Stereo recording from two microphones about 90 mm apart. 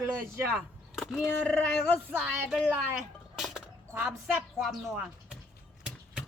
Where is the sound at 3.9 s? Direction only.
20° right (ahead or behind).